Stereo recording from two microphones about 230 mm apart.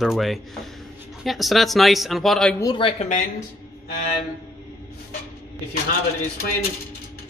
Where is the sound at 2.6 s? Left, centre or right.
Left.